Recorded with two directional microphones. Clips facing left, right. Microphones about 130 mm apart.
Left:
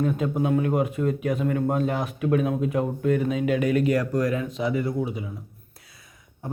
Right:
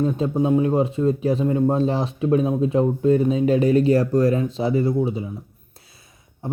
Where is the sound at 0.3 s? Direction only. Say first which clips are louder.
Right 6 dB; 20° right (ahead or behind).